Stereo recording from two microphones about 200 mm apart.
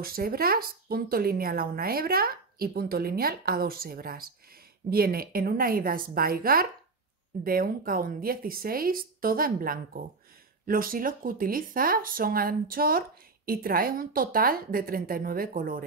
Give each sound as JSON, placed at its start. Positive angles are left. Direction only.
{"t": 0.0, "sound": "speech", "side_deg": -45}